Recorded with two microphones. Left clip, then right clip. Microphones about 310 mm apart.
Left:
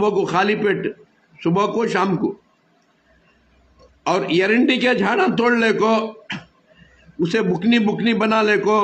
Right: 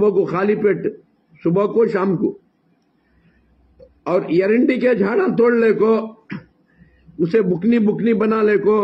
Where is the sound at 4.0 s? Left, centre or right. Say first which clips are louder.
Right 1 dB; centre.